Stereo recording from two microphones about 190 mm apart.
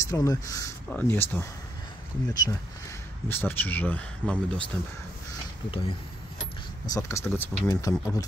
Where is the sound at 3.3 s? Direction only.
10° left (ahead or behind).